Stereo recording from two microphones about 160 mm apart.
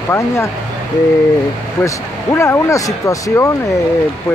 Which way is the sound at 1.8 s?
15° left (ahead or behind).